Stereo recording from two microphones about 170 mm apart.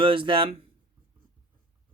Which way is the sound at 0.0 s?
30° right (ahead or behind).